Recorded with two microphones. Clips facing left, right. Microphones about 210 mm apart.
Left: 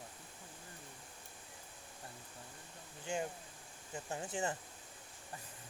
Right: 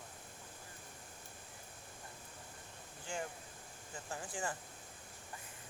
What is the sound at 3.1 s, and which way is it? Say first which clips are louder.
Speech: left 4 dB; 20° left (ahead or behind).